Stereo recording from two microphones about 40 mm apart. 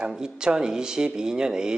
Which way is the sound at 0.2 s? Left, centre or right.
Centre.